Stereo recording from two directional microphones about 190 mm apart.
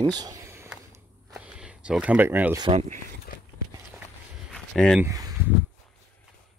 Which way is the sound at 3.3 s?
50° left (ahead or behind).